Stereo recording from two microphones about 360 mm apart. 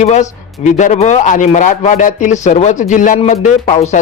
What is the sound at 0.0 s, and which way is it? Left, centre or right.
Music, centre.